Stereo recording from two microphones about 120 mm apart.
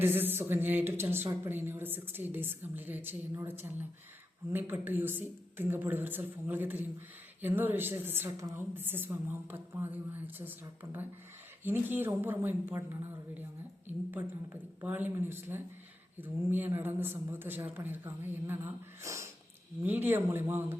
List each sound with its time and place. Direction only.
0.0 s speech: 15° right (ahead or behind)
4.5 s speech: 15° right (ahead or behind)
11.6 s a man's voice: 15° right (ahead or behind)